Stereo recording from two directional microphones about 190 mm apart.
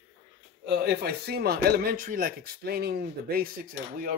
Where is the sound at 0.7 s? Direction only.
55° right (ahead or behind).